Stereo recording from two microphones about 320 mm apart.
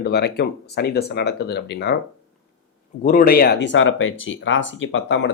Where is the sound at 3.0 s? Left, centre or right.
Left.